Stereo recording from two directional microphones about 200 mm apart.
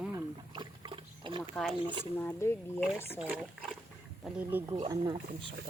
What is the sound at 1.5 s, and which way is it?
Speech, 5° left (ahead or behind).